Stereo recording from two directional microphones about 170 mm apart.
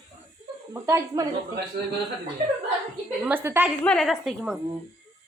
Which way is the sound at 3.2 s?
15° right (ahead or behind).